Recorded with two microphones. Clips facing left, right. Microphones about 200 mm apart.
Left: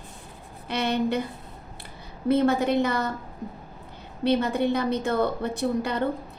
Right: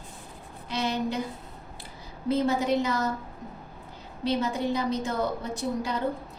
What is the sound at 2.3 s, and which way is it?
Speech, 60° left (ahead or behind).